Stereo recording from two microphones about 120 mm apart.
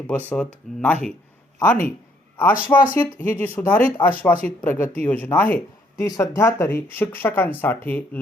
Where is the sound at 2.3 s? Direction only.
15° left (ahead or behind).